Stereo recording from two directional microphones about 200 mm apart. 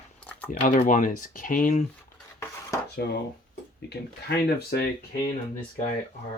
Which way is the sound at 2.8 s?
55° left (ahead or behind).